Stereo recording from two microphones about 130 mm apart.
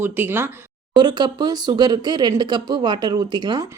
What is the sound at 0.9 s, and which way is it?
Speech, 35° right (ahead or behind).